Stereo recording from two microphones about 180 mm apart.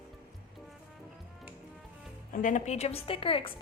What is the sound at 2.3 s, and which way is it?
A woman's voice, 45° left (ahead or behind).